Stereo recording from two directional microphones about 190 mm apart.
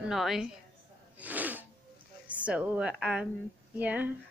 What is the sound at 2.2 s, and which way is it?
A woman's voice, 5° right (ahead or behind).